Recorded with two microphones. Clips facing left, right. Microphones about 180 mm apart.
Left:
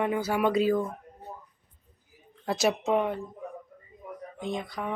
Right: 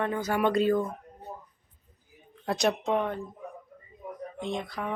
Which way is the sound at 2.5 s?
5° left (ahead or behind).